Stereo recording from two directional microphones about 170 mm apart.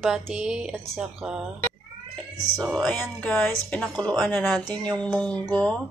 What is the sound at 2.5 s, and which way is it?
Speech, centre (ahead or behind).